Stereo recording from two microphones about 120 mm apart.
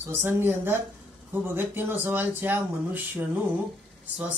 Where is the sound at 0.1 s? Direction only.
20° right (ahead or behind).